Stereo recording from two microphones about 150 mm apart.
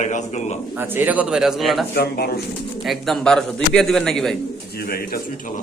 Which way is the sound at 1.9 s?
90° left.